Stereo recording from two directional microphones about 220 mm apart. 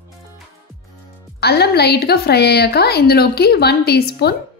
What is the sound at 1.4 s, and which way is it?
A woman's voice, 45° left (ahead or behind).